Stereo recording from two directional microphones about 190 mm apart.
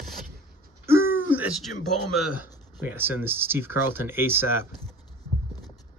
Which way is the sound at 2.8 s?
10° right (ahead or behind).